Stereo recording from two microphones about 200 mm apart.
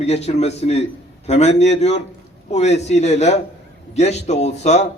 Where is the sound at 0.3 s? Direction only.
30° left (ahead or behind).